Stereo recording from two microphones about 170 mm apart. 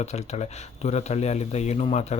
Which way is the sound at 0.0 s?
40° left (ahead or behind).